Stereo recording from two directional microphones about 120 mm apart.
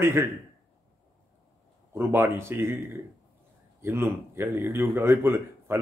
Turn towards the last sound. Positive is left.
turn(degrees=-20)  # may be behind; listen again after turning